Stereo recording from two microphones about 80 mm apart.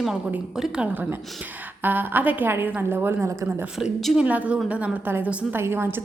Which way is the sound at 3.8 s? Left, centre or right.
Centre.